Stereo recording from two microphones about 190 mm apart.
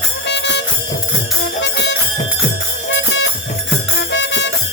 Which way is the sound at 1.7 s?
65° left (ahead or behind).